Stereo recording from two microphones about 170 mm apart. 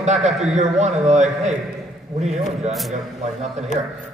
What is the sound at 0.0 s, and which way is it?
A man's voice, 40° right (ahead or behind).